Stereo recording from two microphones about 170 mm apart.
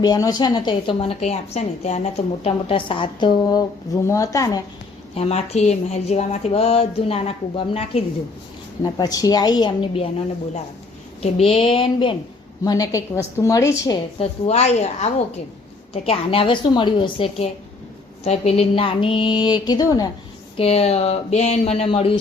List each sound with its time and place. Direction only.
0.0 s a woman's voice: 20° left (ahead or behind)
5.1 s speech: 40° left (ahead or behind)
8.8 s a woman's voice: 20° left (ahead or behind)
11.2 s a woman's voice: 35° left (ahead or behind); by 14.0 s 20° left (ahead or behind)
14.2 s a woman's voice: 40° left (ahead or behind); by 20.1 s 20° left (ahead or behind)
20.6 s speech: 35° left (ahead or behind)